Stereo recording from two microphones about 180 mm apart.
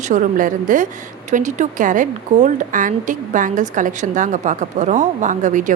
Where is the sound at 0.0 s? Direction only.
45° right (ahead or behind).